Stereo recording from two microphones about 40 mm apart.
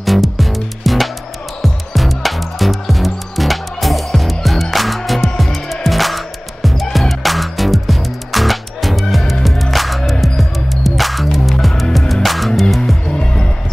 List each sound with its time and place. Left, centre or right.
0.0 s music: centre
13.1 s music: left